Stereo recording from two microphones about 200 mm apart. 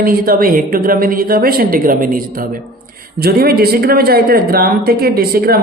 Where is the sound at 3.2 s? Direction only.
50° right (ahead or behind).